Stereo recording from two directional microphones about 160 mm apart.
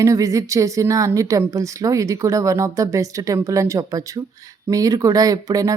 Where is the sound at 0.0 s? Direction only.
20° right (ahead or behind).